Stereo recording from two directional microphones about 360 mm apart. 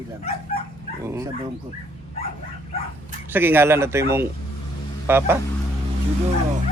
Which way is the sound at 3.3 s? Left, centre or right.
Centre.